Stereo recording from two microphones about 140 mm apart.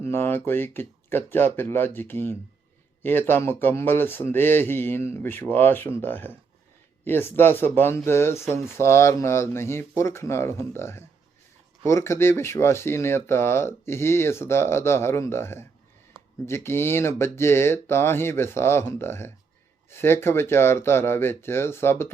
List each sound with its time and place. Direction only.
0.0 s speech: 15° left (ahead or behind)